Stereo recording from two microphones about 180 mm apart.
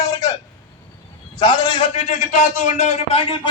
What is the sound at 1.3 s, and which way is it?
A man's voice, 25° left (ahead or behind).